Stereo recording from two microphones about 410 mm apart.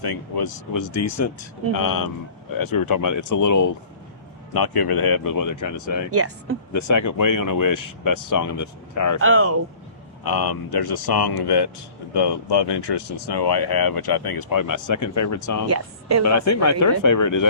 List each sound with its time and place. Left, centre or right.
0.0 s speech: left
4.5 s speech: left
6.1 s speech: right
6.7 s speech: left
9.2 s speech: right
10.2 s speech: left
15.7 s speech: right
16.2 s speech: left